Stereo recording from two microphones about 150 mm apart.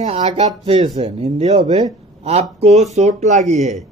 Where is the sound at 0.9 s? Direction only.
45° right (ahead or behind).